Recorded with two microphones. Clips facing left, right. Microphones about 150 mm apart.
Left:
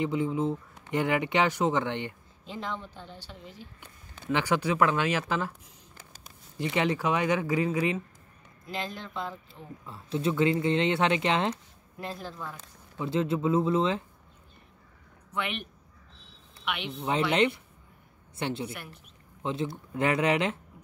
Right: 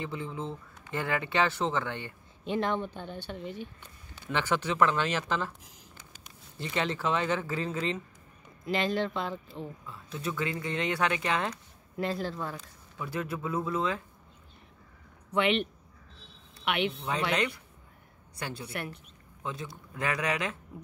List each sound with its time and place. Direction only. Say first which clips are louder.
0.0 s speech: left 8 dB; 15° left (ahead or behind)
2.4 s a woman's voice: right 7 dB; 65° right (ahead or behind)
3.8 s speech: left 5 dB; 10° left (ahead or behind)
6.6 s speech: left 4 dB; 15° left (ahead or behind)
8.6 s speech: right 8 dB; 75° right (ahead or behind)
9.8 s speech: left 10 dB; 30° left (ahead or behind)
12.0 s speech: right 6 dB; 80° right
12.9 s speech: left 7 dB; 25° left (ahead or behind)
15.3 s speech: right 7 dB; 70° right (ahead or behind)
17.3 s a woman's voice: left 5 dB; 25° left (ahead or behind)
18.7 s a woman's voice: right 5 dB; 65° right (ahead or behind)
19.4 s speech: left 7 dB; 25° left (ahead or behind)